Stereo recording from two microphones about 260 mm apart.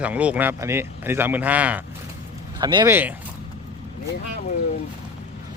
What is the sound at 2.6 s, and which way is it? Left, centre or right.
Speech, centre.